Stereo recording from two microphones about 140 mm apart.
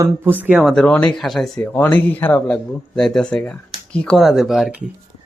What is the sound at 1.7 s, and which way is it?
Speech, 15° left (ahead or behind).